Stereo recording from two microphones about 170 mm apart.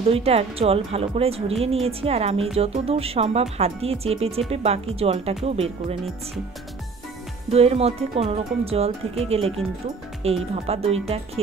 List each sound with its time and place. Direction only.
0.0 s a woman's voice: 35° right (ahead or behind)
7.5 s a woman's voice: 35° right (ahead or behind)